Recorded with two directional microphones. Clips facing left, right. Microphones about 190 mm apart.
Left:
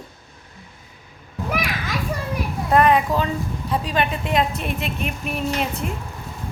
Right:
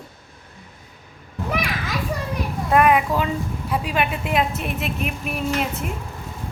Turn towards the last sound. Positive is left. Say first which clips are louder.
# even
turn(degrees=-5)  # may be behind; listen again after turning